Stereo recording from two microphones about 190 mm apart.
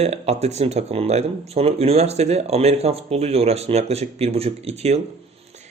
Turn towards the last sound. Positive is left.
turn(degrees=-35)  # may be behind; listen again after turning